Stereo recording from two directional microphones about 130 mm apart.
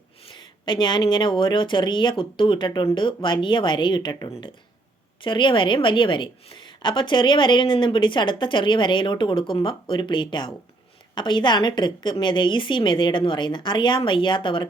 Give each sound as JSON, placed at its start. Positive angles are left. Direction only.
{"t": 0.3, "sound": "a woman's voice", "side_deg": 40}